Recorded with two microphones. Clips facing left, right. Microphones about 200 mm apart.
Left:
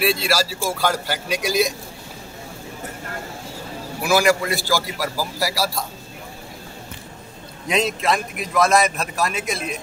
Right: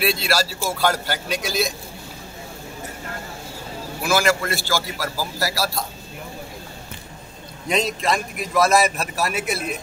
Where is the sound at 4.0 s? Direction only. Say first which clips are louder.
Left 3 dB; 15° left (ahead or behind).